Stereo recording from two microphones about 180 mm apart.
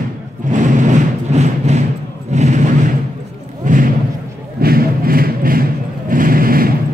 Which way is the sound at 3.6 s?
45° right (ahead or behind).